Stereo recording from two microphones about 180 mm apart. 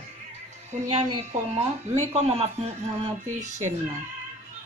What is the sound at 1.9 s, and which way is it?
Speech, 15° right (ahead or behind).